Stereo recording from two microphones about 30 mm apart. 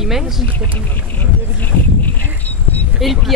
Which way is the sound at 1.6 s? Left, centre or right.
Left.